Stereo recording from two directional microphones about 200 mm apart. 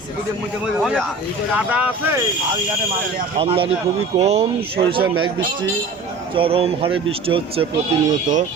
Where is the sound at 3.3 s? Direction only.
25° right (ahead or behind).